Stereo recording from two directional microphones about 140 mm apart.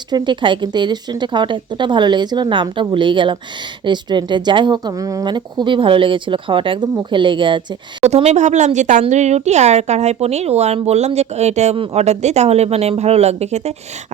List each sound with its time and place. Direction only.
0.1 s a woman's voice: 35° right (ahead or behind)
8.0 s speech: 50° right (ahead or behind)